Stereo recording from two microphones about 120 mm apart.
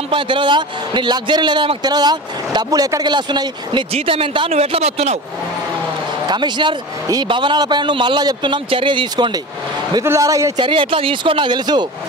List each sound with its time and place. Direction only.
0.1 s a man's voice: 45° right (ahead or behind)
3.9 s speech: 50° right (ahead or behind)
4.6 s speech: 60° right (ahead or behind)
6.2 s a man's voice: 40° right (ahead or behind)
10.0 s a man's voice: 25° right (ahead or behind)
10.6 s speech: 45° right (ahead or behind)